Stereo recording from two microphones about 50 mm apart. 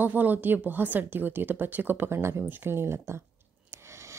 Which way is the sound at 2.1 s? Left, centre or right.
Right.